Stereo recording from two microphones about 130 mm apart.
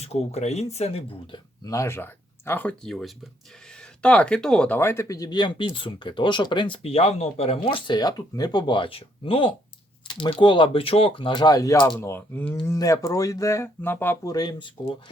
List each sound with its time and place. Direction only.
0.0 s speech: 55° left (ahead or behind)
1.6 s speech: 25° left (ahead or behind); by 4.8 s 5° left (ahead or behind)
4.8 s speech: 20° left (ahead or behind)
14.3 s speech: 30° left (ahead or behind)